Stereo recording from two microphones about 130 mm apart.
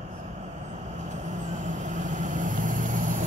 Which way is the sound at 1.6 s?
70° right (ahead or behind).